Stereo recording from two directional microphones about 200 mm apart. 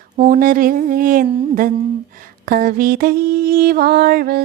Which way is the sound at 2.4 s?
45° right (ahead or behind).